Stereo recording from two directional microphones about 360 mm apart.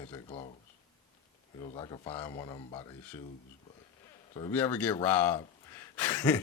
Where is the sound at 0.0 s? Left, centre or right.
Centre.